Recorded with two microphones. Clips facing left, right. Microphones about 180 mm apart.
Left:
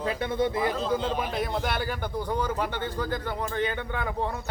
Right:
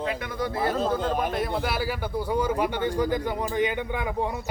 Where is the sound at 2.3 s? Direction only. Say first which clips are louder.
Right 5 dB; 10° right (ahead or behind).